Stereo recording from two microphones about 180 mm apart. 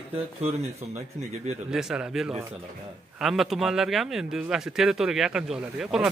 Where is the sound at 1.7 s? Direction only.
5° right (ahead or behind).